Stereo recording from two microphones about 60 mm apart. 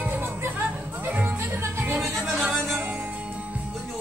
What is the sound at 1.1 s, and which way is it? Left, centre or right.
Music, right.